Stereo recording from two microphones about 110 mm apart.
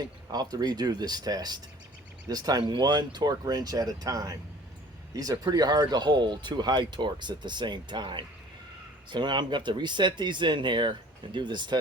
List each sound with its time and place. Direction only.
0.0 s speech: 40° right (ahead or behind)